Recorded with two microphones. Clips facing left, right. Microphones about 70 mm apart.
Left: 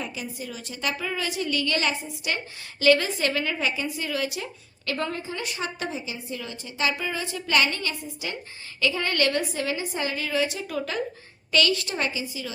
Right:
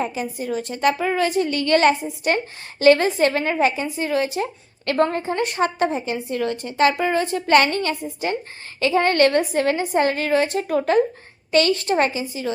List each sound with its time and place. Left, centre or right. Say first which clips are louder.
0.0 s a woman's voice: right 9 dB; right